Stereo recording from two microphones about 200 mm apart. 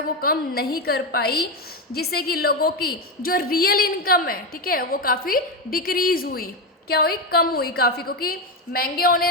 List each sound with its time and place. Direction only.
0.2 s a woman's voice: 50° left (ahead or behind)